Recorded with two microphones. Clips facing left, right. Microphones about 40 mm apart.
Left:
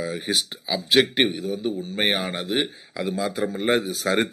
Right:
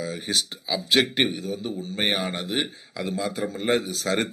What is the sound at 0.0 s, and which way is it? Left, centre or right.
A man's voice, centre.